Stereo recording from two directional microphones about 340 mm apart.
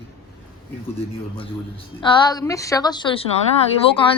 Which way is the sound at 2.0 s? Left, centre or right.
Centre.